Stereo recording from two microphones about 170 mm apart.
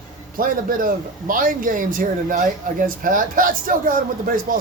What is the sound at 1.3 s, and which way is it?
Speech, 55° right (ahead or behind).